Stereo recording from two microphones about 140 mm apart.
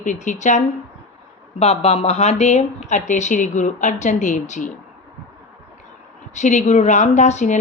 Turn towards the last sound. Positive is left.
turn(degrees=55)  # may be behind; listen again after turning